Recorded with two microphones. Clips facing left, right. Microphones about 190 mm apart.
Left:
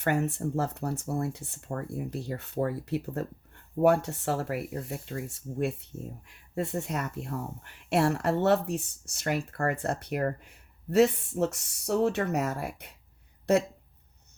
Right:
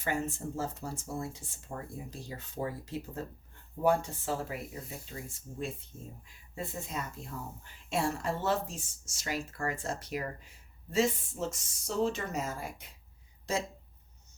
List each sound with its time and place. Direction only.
0.0 s speech: 65° left (ahead or behind)